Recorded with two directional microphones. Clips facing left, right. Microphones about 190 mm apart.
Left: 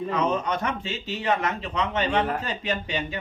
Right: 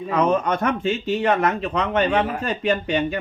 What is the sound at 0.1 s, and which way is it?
Speech, 55° right (ahead or behind).